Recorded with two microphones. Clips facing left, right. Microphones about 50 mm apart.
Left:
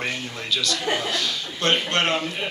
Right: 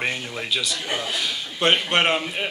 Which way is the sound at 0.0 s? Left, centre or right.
Centre.